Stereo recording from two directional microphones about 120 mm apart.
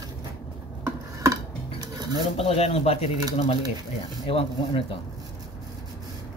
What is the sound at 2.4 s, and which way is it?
Speech, 55° left (ahead or behind).